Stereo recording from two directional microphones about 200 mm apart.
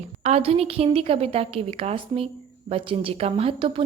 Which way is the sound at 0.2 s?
30° right (ahead or behind).